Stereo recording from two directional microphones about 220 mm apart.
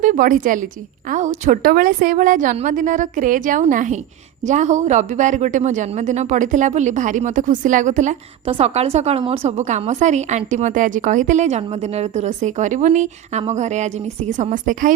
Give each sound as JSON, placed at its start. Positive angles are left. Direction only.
{"t": 0.0, "sound": "a woman's voice", "side_deg": -40}